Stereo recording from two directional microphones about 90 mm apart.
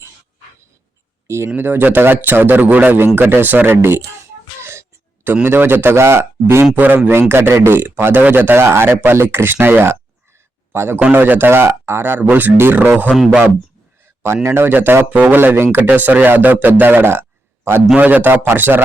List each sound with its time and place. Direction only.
1.5 s speech: 25° right (ahead or behind)
14.4 s speech: 25° right (ahead or behind)